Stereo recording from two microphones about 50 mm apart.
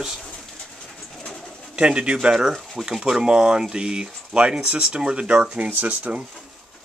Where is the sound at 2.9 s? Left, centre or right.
Centre.